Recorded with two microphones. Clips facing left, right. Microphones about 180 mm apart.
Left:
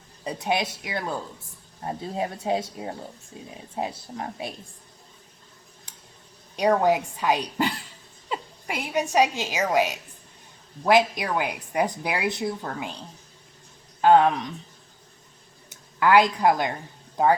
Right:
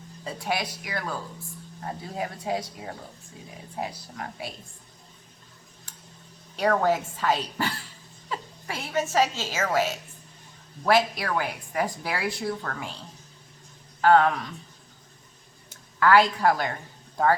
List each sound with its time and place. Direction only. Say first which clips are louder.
0.3 s speech: left 4 dB; 20° left (ahead or behind)
6.6 s a woman's voice: left 3 dB; 15° left (ahead or behind)
14.0 s speech: left 2 dB; 20° left (ahead or behind)
15.7 s speech: left 1 dB; 15° left (ahead or behind)